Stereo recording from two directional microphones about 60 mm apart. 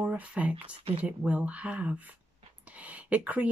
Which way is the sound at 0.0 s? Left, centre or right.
Right.